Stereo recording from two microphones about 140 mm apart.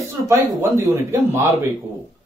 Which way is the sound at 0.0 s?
20° right (ahead or behind).